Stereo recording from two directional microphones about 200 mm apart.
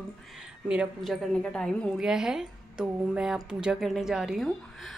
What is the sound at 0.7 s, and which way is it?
A woman's voice, centre (ahead or behind).